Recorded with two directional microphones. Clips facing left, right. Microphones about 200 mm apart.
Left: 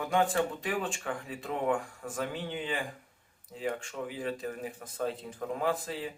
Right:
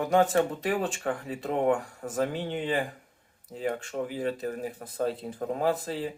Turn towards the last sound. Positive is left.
turn(degrees=-35)  # may be behind; listen again after turning